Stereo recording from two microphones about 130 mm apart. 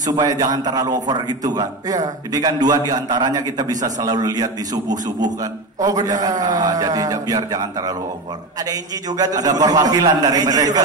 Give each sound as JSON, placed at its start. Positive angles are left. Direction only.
{"t": 0.0, "sound": "a man's voice", "side_deg": -30}